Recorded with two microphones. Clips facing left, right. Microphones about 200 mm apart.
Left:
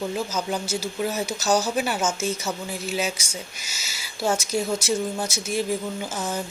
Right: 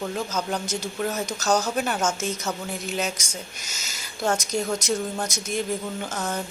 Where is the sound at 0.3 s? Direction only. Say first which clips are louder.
Left 1 dB; 5° left (ahead or behind).